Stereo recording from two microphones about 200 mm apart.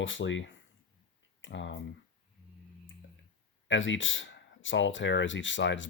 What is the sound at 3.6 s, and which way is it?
Speech, 70° left (ahead or behind).